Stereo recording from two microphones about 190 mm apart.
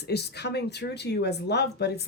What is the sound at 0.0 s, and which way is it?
Speech, 60° left (ahead or behind).